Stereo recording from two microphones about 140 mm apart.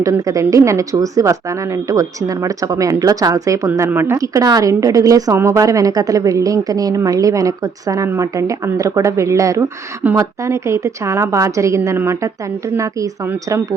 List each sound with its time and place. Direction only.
0.0 s a woman's voice: 25° right (ahead or behind)